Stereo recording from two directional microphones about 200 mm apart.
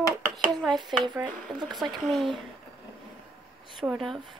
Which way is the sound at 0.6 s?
Centre (ahead or behind).